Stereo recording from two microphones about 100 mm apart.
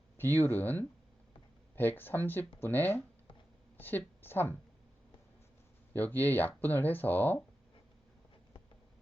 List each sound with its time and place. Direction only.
0.2 s speech: 20° left (ahead or behind)
5.9 s speech: 20° left (ahead or behind)